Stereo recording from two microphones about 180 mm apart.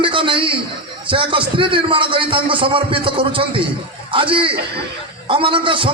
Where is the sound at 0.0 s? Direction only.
30° right (ahead or behind).